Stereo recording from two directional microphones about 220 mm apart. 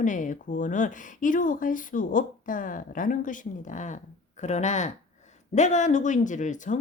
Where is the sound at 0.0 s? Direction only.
35° left (ahead or behind).